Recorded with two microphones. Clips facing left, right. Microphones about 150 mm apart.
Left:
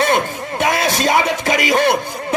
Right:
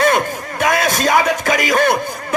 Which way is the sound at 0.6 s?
50° right (ahead or behind).